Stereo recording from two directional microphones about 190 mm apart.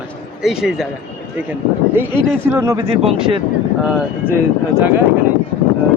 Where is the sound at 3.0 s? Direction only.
30° right (ahead or behind).